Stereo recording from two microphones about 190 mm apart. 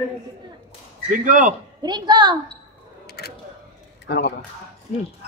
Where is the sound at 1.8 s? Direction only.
20° right (ahead or behind).